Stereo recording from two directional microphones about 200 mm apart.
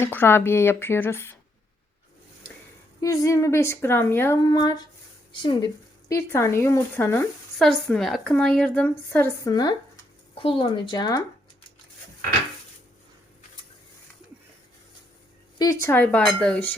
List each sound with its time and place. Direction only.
0.0 s a woman's voice: 10° left (ahead or behind)
3.0 s a woman's voice: 15° left (ahead or behind)
15.5 s a woman's voice: 15° left (ahead or behind)